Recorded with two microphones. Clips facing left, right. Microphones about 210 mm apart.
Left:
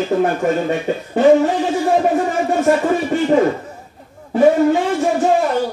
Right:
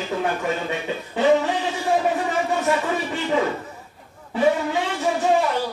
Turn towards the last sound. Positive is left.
turn(degrees=45)  # may be behind; listen again after turning